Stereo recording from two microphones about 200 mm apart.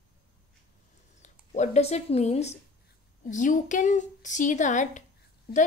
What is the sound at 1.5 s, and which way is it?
A woman's voice, 35° left (ahead or behind).